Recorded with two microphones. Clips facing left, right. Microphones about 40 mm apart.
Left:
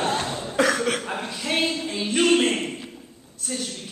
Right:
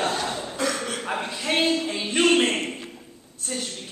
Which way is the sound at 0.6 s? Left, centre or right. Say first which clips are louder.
Left 6 dB; left.